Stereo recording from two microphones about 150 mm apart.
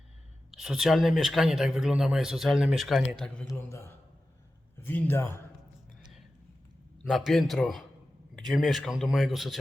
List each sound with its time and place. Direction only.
0.5 s speech: 5° right (ahead or behind)
3.5 s speech: 15° left (ahead or behind)
7.0 s speech: centre (ahead or behind)